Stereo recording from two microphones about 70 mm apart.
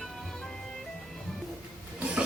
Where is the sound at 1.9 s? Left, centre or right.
Centre.